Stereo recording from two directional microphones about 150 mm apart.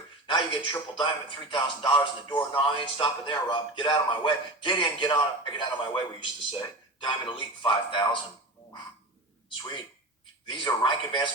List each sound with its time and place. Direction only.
0.3 s speech: 35° left (ahead or behind)
10.5 s speech: 30° left (ahead or behind)